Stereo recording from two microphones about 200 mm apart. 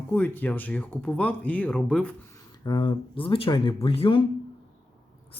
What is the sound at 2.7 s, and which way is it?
Speech, 25° left (ahead or behind).